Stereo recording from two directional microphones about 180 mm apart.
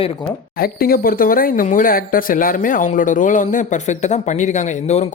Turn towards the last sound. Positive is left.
turn(degrees=40)  # may be behind; listen again after turning